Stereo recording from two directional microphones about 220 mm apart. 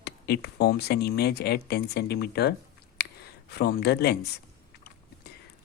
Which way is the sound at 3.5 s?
45° left (ahead or behind).